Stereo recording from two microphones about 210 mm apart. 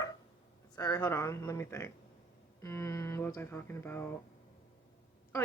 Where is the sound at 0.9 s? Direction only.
10° left (ahead or behind).